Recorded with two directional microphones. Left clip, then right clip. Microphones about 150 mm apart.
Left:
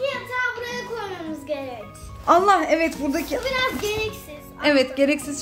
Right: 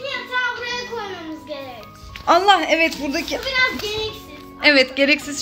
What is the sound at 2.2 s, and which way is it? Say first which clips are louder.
Speech: right 2 dB; 10° left (ahead or behind).